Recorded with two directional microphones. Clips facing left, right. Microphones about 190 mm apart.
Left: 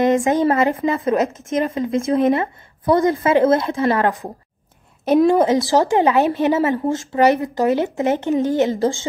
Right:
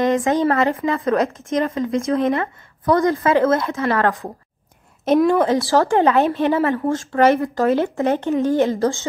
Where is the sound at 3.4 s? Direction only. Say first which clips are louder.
Left 2 dB; 30° left (ahead or behind).